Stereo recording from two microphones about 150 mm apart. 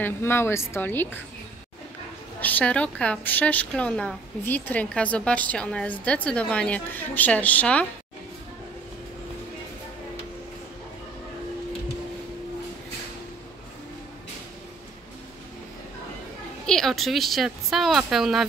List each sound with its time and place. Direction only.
0.0 s a woman's voice: 15° left (ahead or behind)
2.4 s a woman's voice: 10° left (ahead or behind)
16.6 s speech: 5° left (ahead or behind)